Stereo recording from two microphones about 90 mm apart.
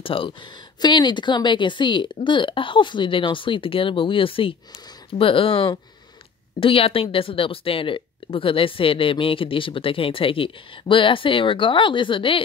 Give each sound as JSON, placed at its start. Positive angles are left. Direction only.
{"t": 0.0, "sound": "speech", "side_deg": 80}